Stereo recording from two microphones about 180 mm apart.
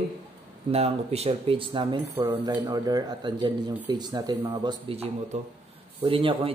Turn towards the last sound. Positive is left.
turn(degrees=-30)  # may be behind; listen again after turning